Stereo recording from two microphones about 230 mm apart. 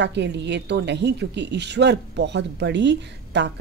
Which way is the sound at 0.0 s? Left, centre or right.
Right.